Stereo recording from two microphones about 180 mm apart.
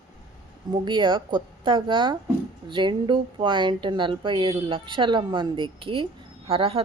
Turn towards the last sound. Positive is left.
turn(degrees=-30)  # may be behind; listen again after turning